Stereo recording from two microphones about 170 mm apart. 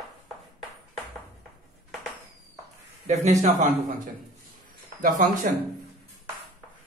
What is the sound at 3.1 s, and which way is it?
A man's voice, 45° right (ahead or behind).